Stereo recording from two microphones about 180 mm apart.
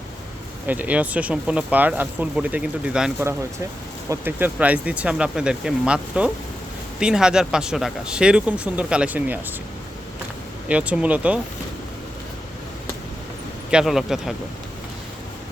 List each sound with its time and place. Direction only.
0.7 s speech: 10° right (ahead or behind)
10.7 s speech: 5° right (ahead or behind)
13.7 s speech: 5° right (ahead or behind)